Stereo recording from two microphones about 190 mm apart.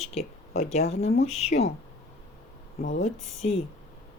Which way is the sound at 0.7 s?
35° left (ahead or behind).